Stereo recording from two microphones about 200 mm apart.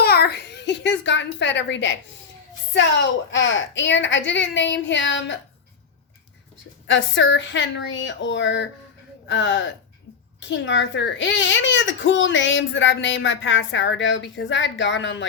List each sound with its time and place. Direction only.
0.0 s a sound: 50° left (ahead or behind)
2.7 s a woman's voice: 65° left (ahead or behind)
6.8 s a woman's voice: 70° left (ahead or behind)